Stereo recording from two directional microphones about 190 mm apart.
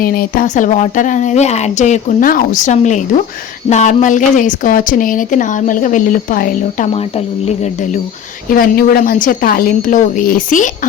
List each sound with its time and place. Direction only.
0.0 s speech: 50° left (ahead or behind)
8.5 s speech: 50° left (ahead or behind)